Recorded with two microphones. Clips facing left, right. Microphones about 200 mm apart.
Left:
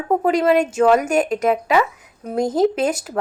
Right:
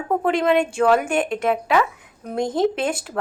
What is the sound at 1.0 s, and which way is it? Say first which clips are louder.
Speech: left 3 dB; 40° left (ahead or behind).